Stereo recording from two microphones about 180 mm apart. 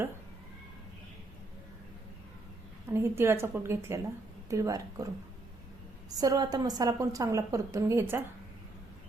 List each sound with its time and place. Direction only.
2.9 s a woman's voice: 15° right (ahead or behind)
6.1 s a woman's voice: 20° right (ahead or behind)